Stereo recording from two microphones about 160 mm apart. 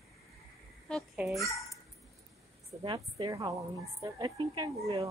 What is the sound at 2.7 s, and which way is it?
A woman's voice, 25° right (ahead or behind).